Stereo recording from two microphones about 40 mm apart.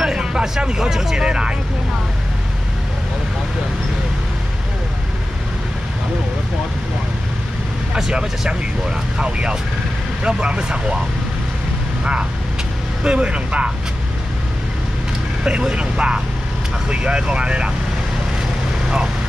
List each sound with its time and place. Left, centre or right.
0.0 s speech: centre
1.1 s speech: right
7.9 s speech: right
12.0 s speech: right
15.4 s speech: right